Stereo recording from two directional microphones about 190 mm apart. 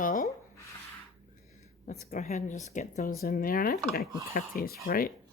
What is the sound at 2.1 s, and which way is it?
Speech, 40° left (ahead or behind).